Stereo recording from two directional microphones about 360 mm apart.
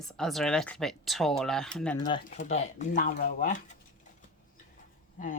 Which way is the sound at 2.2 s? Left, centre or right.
Centre.